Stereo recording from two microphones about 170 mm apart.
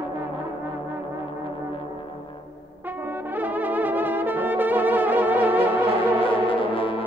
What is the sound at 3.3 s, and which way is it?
Brass instrument, 10° right (ahead or behind).